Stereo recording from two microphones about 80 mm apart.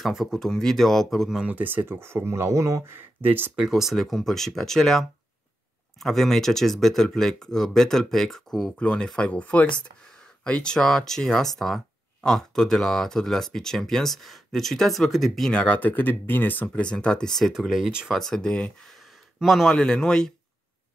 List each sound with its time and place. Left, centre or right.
0.0 s speech: centre
1.4 s speech: right
2.9 s speech: right
3.5 s speech: centre
15.5 s speech: centre
18.9 s speech: centre